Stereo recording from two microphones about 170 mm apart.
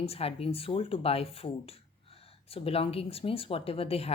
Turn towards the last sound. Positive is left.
turn(degrees=35)  # may be behind; listen again after turning